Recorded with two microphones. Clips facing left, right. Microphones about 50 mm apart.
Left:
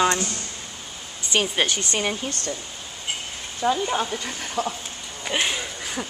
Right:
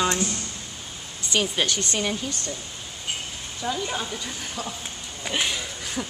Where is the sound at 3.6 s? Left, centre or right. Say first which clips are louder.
Left 6 dB; left.